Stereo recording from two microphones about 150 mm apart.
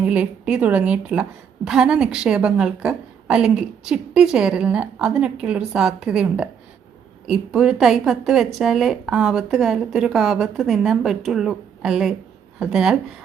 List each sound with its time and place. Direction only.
0.0 s a woman's voice: 10° right (ahead or behind)